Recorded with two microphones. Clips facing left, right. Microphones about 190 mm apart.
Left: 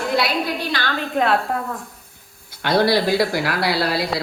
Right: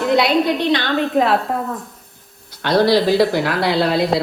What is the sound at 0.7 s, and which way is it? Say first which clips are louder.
Speech: right 7 dB; 20° right (ahead or behind).